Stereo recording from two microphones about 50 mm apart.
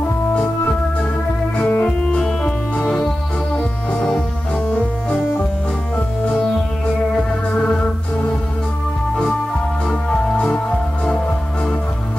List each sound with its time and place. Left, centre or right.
1.6 s music: left
1.9 s music: centre
9.8 s music: centre